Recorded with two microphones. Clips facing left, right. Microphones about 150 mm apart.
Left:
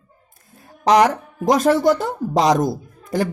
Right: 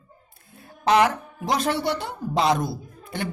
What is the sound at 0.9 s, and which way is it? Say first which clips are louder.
Speech: left 4 dB; 40° left (ahead or behind).